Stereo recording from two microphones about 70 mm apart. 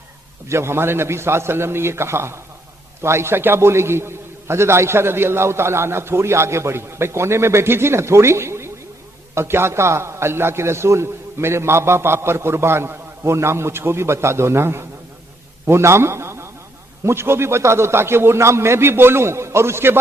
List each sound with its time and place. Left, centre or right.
0.4 s a man's voice: right